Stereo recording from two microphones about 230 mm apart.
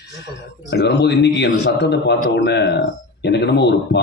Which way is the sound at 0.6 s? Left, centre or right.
Left.